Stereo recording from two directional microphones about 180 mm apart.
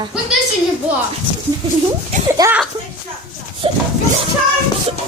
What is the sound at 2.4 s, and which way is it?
Speech, 20° right (ahead or behind).